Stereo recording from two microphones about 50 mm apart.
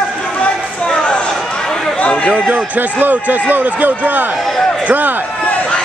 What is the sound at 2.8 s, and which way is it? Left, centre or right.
A man's voice, right.